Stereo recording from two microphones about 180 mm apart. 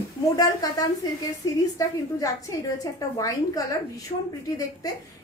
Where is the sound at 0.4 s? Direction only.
20° left (ahead or behind).